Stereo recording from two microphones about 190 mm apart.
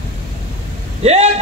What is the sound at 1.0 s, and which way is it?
Speech, 35° right (ahead or behind).